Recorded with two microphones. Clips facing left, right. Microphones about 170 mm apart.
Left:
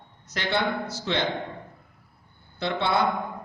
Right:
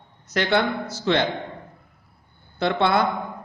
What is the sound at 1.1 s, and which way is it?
Speech, 65° right (ahead or behind).